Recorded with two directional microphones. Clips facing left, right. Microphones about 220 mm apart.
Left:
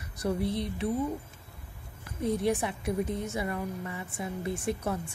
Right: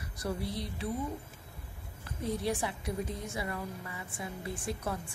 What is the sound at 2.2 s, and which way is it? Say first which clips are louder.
A woman's voice: left 5 dB; 20° left (ahead or behind).